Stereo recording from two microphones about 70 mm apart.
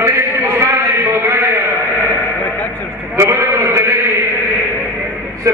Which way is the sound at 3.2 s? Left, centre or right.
Right.